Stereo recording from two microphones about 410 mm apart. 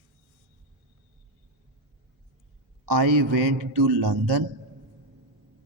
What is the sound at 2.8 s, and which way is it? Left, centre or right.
A man's voice, right.